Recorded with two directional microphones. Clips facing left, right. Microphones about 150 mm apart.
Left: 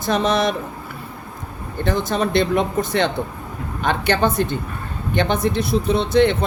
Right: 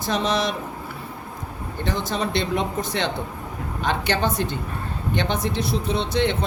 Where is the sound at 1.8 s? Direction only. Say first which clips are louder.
Left 5 dB; 50° left (ahead or behind).